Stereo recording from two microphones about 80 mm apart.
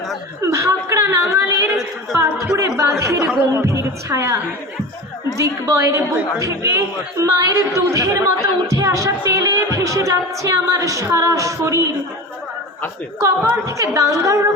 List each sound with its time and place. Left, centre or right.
0.4 s speech: right
5.4 s speech: right
13.2 s speech: right